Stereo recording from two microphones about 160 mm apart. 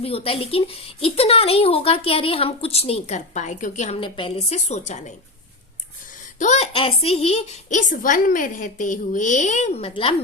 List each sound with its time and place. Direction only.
0.0 s speech: 35° left (ahead or behind)
4.0 s a woman's voice: 30° left (ahead or behind)
6.4 s a woman's voice: 45° left (ahead or behind)